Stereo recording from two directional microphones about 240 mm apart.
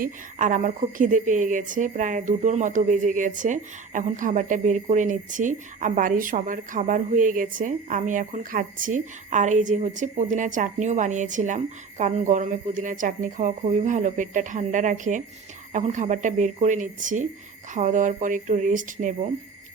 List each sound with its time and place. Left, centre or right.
0.0 s speech: right